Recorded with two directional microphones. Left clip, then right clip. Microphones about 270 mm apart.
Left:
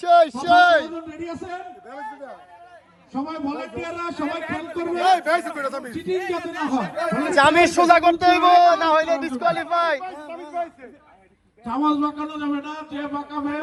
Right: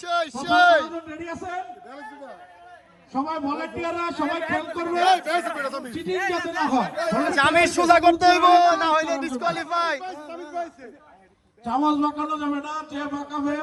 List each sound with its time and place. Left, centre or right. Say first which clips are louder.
0.0 s a sound: left 10 dB; centre
3.1 s a man's voice: right 2 dB; right
4.4 s a man's voice: right 3 dB; centre
4.7 s a man's voice: left 1 dB; right
5.0 s a man's voice: left 3 dB; centre
6.7 s a man's voice: left 2 dB; right
7.3 s a man's voice: left 4 dB; centre
10.0 s a sound: left 2 dB; left
11.6 s a man's voice: even; right; by 13.5 s centre